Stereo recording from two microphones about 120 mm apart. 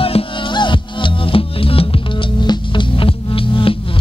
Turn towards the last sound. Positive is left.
turn(degrees=45)  # may be behind; listen again after turning